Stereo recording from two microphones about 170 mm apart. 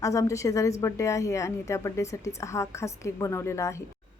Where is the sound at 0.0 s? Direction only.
20° left (ahead or behind).